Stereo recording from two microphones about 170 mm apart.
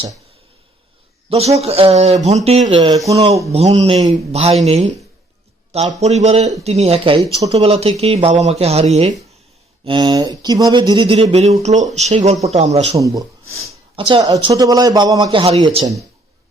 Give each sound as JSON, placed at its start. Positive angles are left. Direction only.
{"t": 1.3, "sound": "speech", "side_deg": -40}
{"t": 6.0, "sound": "speech", "side_deg": -40}
{"t": 9.8, "sound": "a man's voice", "side_deg": -25}
{"t": 13.0, "sound": "a man's voice", "side_deg": -20}
{"t": 13.9, "sound": "a man's voice", "side_deg": -35}